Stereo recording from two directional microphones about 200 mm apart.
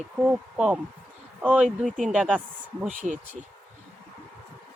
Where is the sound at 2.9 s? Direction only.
35° right (ahead or behind).